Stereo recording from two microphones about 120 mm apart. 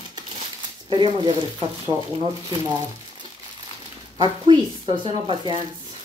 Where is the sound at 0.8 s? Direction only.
40° right (ahead or behind).